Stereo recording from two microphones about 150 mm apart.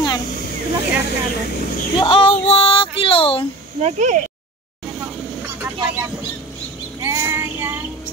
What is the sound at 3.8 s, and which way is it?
Speech, 55° right (ahead or behind).